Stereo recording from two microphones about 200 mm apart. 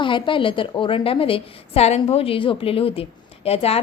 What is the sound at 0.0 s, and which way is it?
A woman's voice, 25° left (ahead or behind).